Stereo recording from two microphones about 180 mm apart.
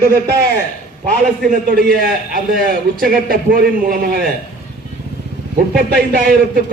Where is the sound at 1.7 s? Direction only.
55° right (ahead or behind).